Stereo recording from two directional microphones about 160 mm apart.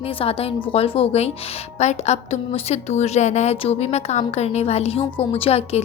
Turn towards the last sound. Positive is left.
turn(degrees=40)  # may be behind; listen again after turning